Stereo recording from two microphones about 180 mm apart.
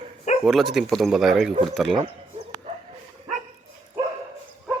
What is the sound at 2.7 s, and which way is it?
Dog, 25° right (ahead or behind).